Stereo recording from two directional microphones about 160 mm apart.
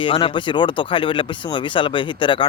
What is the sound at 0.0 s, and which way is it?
Speech, 35° left (ahead or behind).